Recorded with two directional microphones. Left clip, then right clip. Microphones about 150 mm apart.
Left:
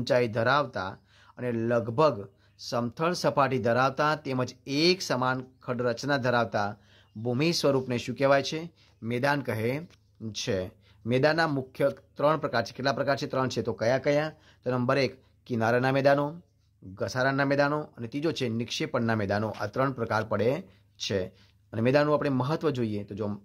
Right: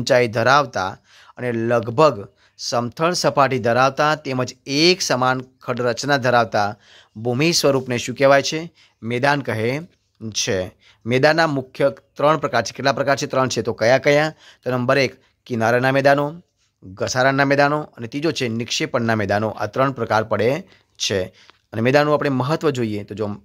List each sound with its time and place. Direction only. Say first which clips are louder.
0.0 s speech: right 9 dB; 35° right (ahead or behind)
16.9 s speech: right 10 dB; 35° right (ahead or behind)